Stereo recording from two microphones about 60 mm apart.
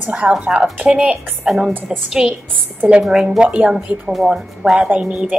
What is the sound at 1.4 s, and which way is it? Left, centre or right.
A woman's voice, centre.